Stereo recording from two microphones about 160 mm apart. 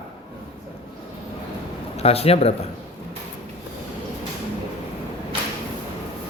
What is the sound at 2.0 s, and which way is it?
Speech, 40° left (ahead or behind).